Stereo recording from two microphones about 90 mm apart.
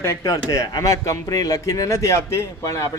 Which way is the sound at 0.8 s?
40° left (ahead or behind).